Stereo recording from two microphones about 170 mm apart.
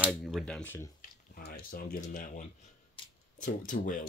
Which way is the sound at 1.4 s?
60° left (ahead or behind).